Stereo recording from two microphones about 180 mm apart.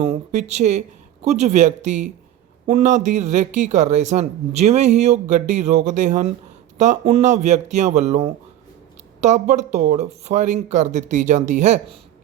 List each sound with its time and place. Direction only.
0.0 s speech: 40° right (ahead or behind)